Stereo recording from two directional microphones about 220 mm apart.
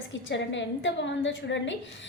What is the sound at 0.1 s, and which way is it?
A woman's voice, 55° left (ahead or behind).